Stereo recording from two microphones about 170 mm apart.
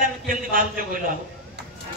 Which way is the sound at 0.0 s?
55° right (ahead or behind).